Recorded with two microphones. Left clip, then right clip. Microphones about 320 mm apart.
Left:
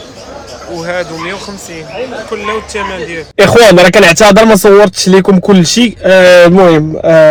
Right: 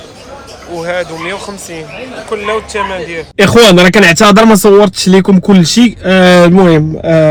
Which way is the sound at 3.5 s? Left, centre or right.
Left.